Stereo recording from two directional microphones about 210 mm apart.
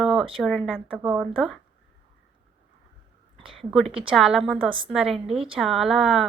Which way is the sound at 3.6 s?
Centre (ahead or behind).